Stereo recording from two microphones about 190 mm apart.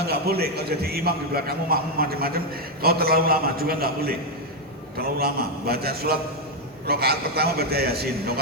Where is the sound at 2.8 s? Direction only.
55° right (ahead or behind).